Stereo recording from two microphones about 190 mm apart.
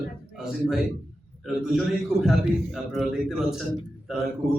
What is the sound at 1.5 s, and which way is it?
A man's voice, centre (ahead or behind).